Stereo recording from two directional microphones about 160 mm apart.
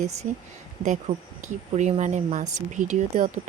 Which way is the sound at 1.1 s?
40° right (ahead or behind).